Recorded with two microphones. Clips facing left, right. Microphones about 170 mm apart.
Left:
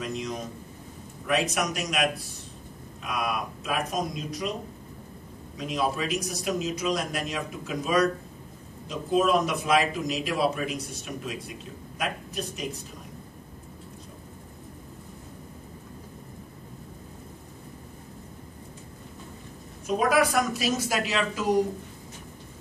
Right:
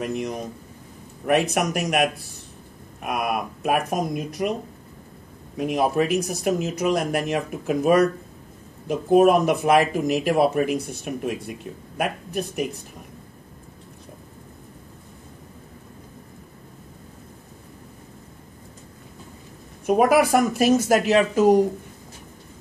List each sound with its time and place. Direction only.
0.0 s speech: 55° right (ahead or behind)
5.6 s speech: 60° right (ahead or behind)
19.9 s speech: 60° right (ahead or behind)